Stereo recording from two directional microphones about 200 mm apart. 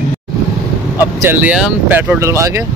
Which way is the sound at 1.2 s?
10° right (ahead or behind).